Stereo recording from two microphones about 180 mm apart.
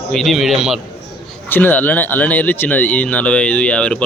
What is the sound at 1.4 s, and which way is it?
Speech, 10° left (ahead or behind).